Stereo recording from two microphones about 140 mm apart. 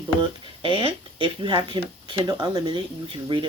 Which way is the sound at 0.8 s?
35° right (ahead or behind).